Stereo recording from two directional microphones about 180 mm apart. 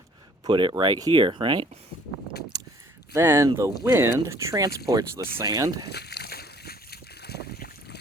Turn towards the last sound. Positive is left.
turn(degrees=60)  # may be behind; listen again after turning